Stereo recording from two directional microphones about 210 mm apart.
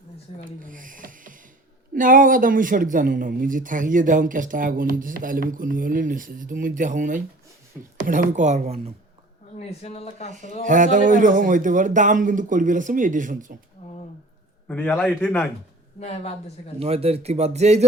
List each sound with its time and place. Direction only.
0.6 s rub: 40° right (ahead or behind)
2.0 s speech: 40° right (ahead or behind)
9.6 s speech: 30° left (ahead or behind)
10.6 s speech: 35° right (ahead or behind)
14.7 s a man's voice: 5° left (ahead or behind)
16.0 s speech: 30° left (ahead or behind)
16.8 s speech: 30° right (ahead or behind)